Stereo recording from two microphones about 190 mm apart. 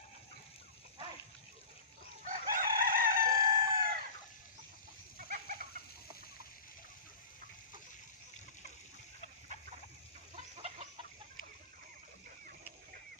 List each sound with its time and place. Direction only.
2.2 s chicken: 45° right (ahead or behind)
5.1 s chicken: 50° right (ahead or behind)